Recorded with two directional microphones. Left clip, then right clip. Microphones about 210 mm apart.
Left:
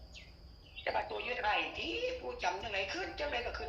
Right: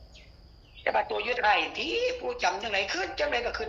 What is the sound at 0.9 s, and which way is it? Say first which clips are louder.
A woman's voice: right 9 dB; 50° right (ahead or behind).